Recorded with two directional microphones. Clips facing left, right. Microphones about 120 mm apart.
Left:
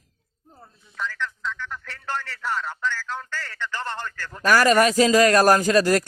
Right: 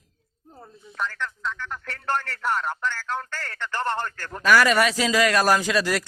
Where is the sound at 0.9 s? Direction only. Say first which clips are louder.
Even; 50° right (ahead or behind).